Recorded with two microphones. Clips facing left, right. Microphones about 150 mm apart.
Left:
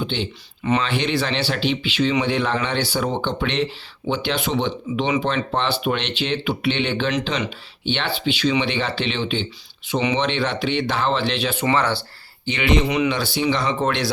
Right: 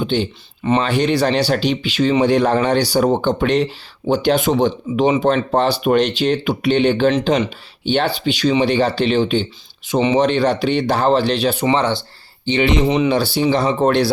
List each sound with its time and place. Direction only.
0.0 s speech: 45° right (ahead or behind)
11.6 s speech: 20° right (ahead or behind); by 14.1 s 40° right (ahead or behind)